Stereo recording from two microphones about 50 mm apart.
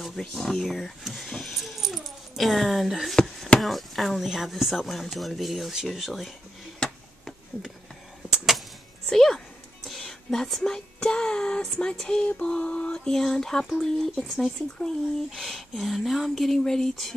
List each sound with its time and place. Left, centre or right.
0.0 s speech: centre
8.5 s a sound: centre
9.8 s whispering: centre
11.0 s child singing: centre
12.4 s mantra: left
13.2 s speech: centre